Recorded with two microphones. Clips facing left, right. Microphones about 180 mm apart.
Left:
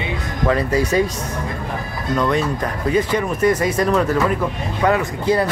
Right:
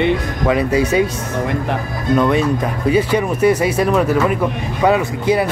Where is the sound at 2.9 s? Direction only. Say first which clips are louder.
Right 2 dB; 10° right (ahead or behind).